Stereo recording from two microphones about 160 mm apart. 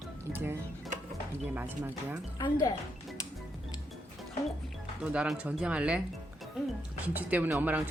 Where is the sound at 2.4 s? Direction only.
25° left (ahead or behind).